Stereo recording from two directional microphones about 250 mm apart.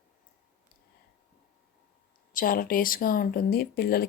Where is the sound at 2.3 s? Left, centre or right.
Left.